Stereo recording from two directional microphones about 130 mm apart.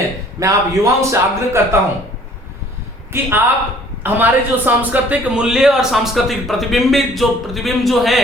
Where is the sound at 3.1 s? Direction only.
15° right (ahead or behind); by 8.2 s centre (ahead or behind).